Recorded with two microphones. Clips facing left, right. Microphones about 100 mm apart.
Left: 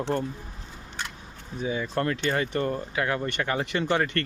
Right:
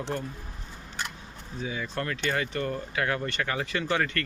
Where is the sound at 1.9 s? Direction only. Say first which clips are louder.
Left 3 dB; 30° left (ahead or behind).